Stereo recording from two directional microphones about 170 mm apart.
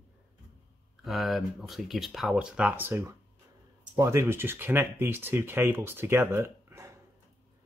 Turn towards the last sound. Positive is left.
turn(degrees=-15)  # may be behind; listen again after turning